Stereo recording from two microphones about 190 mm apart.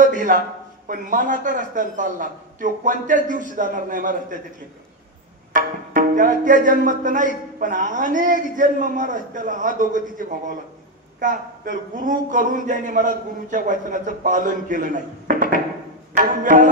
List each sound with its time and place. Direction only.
0.0 s a sound: 45° right (ahead or behind)
0.8 s music: 45° right (ahead or behind)
5.5 s music: 45° right (ahead or behind)